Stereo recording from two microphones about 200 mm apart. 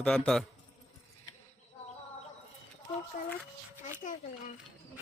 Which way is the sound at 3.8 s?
40° left (ahead or behind).